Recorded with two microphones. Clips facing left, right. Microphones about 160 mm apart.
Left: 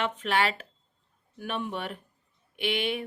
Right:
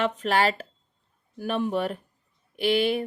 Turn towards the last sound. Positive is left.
turn(degrees=-35)  # may be behind; listen again after turning